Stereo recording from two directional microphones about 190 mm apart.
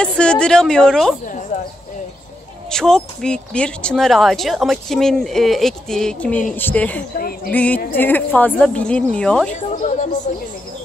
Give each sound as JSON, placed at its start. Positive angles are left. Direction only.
{"t": 0.0, "sound": "speech", "side_deg": 5}
{"t": 1.2, "sound": "speech", "side_deg": 40}
{"t": 2.7, "sound": "a woman's voice", "side_deg": 5}
{"t": 7.2, "sound": "speech", "side_deg": 50}
{"t": 7.5, "sound": "a woman's voice", "side_deg": 5}
{"t": 9.5, "sound": "speech", "side_deg": 40}